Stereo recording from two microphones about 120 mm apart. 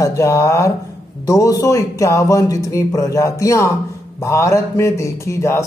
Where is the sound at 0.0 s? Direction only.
25° left (ahead or behind).